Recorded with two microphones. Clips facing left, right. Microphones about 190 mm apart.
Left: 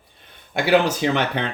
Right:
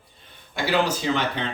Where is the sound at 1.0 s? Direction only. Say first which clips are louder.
Left 4 dB; 65° left (ahead or behind).